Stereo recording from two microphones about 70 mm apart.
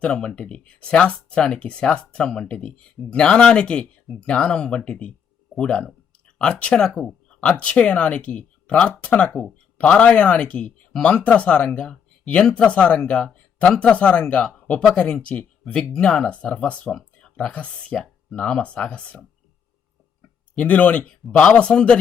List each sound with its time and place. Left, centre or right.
0.0 s speech: centre
20.6 s speech: left